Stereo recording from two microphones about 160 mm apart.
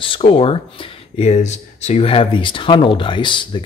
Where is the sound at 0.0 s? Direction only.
35° left (ahead or behind).